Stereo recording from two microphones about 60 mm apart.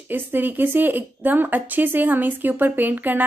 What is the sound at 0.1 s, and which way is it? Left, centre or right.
Speech, right.